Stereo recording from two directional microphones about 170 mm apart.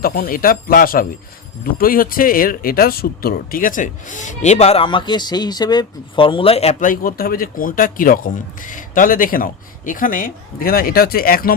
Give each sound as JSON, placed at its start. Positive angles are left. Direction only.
{"t": 0.0, "sound": "speech", "side_deg": 60}
{"t": 6.8, "sound": "speech", "side_deg": 55}